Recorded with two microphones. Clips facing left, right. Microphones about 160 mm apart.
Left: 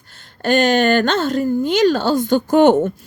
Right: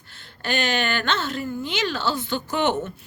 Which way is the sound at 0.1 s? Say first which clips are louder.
Left 11 dB; 45° left (ahead or behind).